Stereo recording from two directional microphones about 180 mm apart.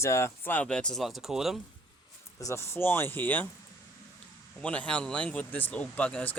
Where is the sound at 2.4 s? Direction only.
15° left (ahead or behind).